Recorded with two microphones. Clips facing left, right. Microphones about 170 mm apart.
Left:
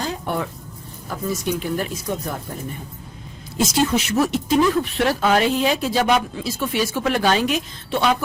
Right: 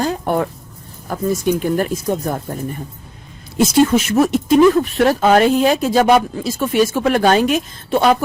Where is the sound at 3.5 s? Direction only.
55° right (ahead or behind).